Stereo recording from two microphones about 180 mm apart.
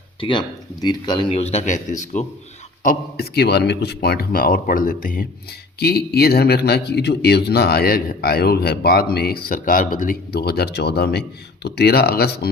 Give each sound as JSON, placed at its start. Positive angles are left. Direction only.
{"t": 0.2, "sound": "speech", "side_deg": 25}
{"t": 2.8, "sound": "speech", "side_deg": 55}
{"t": 5.8, "sound": "speech", "side_deg": 60}